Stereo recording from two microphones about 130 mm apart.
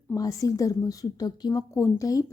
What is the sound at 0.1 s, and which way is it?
A woman's voice, 25° left (ahead or behind).